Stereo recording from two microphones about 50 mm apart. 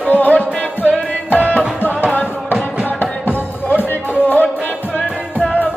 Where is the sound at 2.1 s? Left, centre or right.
Left.